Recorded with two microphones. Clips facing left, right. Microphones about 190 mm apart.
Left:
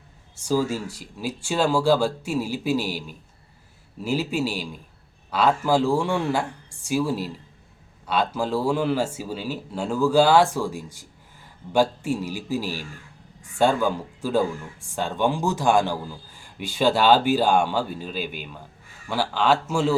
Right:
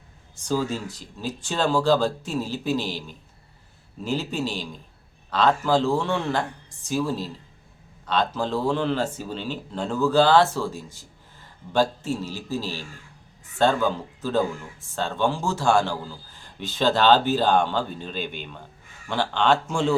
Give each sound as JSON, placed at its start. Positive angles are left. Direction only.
{"t": 0.3, "sound": "speech", "side_deg": 10}